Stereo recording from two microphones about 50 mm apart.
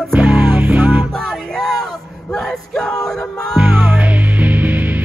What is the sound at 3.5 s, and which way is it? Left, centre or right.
Music, right.